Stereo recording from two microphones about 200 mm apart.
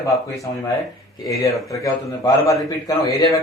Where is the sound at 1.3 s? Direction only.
15° left (ahead or behind).